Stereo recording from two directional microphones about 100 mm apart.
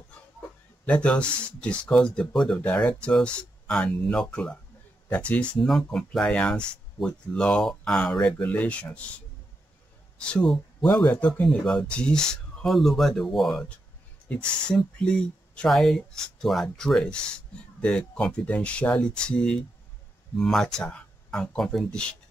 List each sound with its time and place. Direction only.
0.8 s speech: 10° left (ahead or behind)
10.1 s speech: 10° left (ahead or behind)
14.7 s speech: 10° left (ahead or behind)